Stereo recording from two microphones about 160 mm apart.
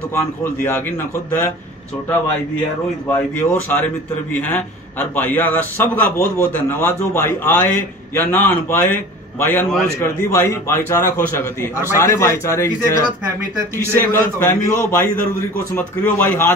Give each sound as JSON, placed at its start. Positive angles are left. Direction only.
{"t": 0.1, "sound": "a man's voice", "side_deg": 15}
{"t": 3.1, "sound": "a man's voice", "side_deg": 10}
{"t": 13.9, "sound": "a man's voice", "side_deg": 15}